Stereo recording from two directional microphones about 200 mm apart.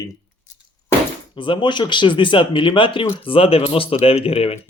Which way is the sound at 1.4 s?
25° left (ahead or behind).